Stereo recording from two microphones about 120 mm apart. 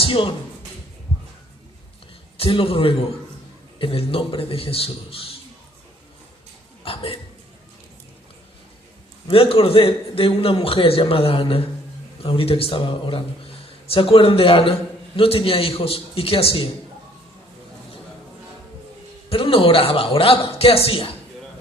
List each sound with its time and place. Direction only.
0.0 s speech: 45° left (ahead or behind)
2.4 s speech: 45° left (ahead or behind)
6.8 s speech: 50° left (ahead or behind)
9.3 s speech: 50° left (ahead or behind)
19.3 s speech: 50° left (ahead or behind)